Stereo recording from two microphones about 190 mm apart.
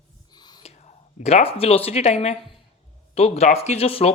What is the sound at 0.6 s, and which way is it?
Speech, 35° left (ahead or behind).